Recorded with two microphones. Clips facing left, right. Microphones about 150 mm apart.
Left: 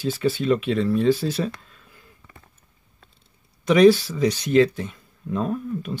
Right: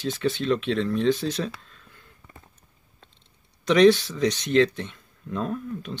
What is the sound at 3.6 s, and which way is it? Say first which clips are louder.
Speech: left 2 dB; 5° left (ahead or behind).